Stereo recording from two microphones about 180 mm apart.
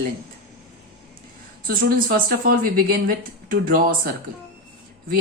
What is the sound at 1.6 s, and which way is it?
A woman's voice, 50° right (ahead or behind).